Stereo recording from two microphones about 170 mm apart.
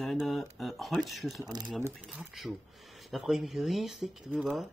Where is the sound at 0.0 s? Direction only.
Centre (ahead or behind).